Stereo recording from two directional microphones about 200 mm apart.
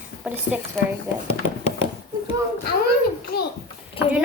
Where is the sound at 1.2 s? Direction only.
30° left (ahead or behind).